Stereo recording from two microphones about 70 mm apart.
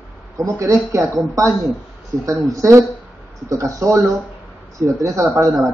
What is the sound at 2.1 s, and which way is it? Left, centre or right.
Speech, right.